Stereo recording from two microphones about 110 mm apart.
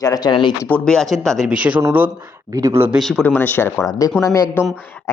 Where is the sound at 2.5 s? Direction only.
30° right (ahead or behind).